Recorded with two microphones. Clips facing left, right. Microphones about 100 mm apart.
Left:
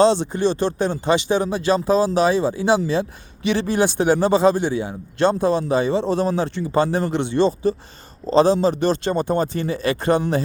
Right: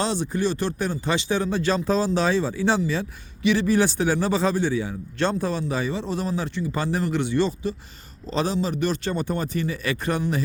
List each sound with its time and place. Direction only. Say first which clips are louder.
0.0 s a man's voice: left 8 dB; 25° left (ahead or behind)